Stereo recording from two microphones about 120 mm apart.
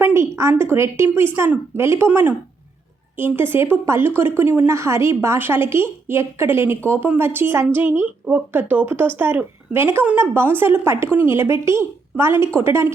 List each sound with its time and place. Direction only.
0.0 s a woman's voice: 20° right (ahead or behind)